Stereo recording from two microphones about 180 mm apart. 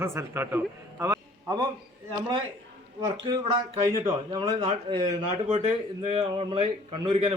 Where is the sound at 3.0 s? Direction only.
20° right (ahead or behind).